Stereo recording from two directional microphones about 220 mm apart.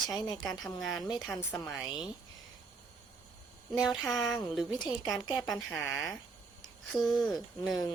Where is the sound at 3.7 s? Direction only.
Centre (ahead or behind).